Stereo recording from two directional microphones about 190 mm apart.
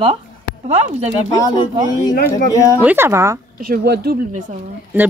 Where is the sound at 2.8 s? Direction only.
10° right (ahead or behind).